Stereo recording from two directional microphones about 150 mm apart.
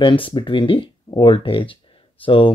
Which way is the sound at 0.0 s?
35° left (ahead or behind).